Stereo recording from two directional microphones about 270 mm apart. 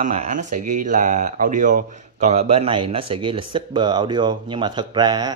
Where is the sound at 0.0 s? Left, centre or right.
Right.